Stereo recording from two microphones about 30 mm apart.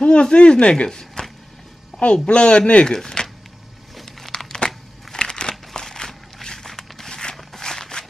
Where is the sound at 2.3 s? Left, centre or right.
Left.